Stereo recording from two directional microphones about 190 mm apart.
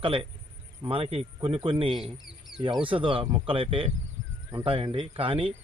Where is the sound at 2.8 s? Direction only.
25° right (ahead or behind).